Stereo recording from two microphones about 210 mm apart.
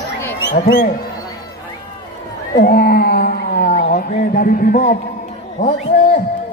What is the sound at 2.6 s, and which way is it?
A man's voice, 45° left (ahead or behind).